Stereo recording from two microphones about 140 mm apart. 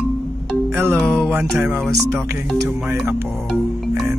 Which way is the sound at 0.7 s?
15° right (ahead or behind).